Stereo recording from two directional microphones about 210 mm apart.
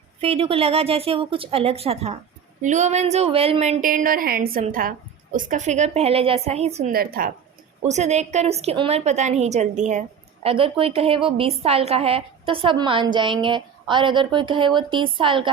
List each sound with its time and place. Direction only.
0.2 s a woman's voice: 25° right (ahead or behind)
6.9 s a woman's voice: 45° right (ahead or behind)
7.9 s a woman's voice: 30° right (ahead or behind)